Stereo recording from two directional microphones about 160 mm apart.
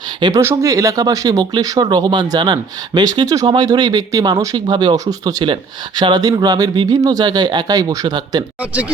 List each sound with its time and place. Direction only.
0.2 s speech: 20° right (ahead or behind)